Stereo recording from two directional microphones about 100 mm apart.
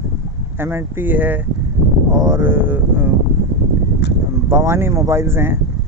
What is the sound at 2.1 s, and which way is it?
Speech, 30° right (ahead or behind).